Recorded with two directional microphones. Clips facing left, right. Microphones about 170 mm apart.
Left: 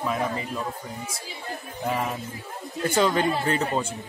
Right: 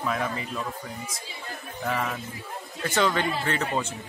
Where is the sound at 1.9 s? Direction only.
20° left (ahead or behind).